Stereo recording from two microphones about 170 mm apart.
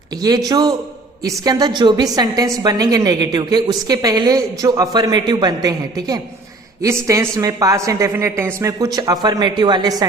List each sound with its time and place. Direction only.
0.2 s a woman's voice: 20° right (ahead or behind)